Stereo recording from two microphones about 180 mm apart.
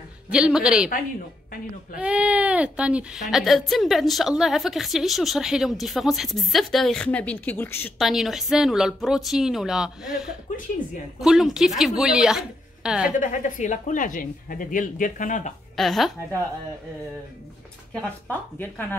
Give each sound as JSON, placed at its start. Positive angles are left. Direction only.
{"t": 0.3, "sound": "speech", "side_deg": -5}
{"t": 2.0, "sound": "speech", "side_deg": -5}
{"t": 8.0, "sound": "speech", "side_deg": 0}
{"t": 11.1, "sound": "speech", "side_deg": 0}
{"t": 13.2, "sound": "speech", "side_deg": 45}
{"t": 15.7, "sound": "speech", "side_deg": 0}
{"t": 18.6, "sound": "speech", "side_deg": 10}